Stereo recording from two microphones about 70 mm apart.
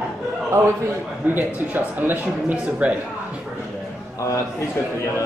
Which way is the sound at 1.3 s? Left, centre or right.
Right.